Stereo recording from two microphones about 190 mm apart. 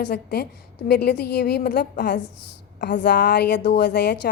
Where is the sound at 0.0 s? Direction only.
60° left (ahead or behind).